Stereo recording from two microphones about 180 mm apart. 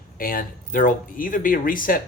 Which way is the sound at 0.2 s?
50° left (ahead or behind).